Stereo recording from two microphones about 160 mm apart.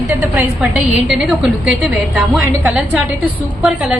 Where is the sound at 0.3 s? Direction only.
5° right (ahead or behind).